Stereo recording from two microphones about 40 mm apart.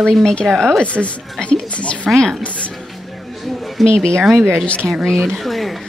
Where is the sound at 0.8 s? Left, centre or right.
Left.